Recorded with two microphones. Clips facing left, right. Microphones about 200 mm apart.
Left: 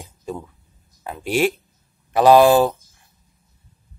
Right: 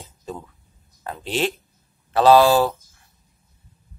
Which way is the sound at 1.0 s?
10° left (ahead or behind).